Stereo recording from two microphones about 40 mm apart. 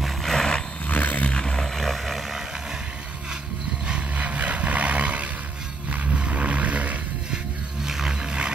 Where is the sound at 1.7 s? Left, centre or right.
Centre.